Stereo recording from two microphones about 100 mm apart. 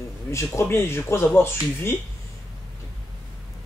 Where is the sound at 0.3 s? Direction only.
30° left (ahead or behind).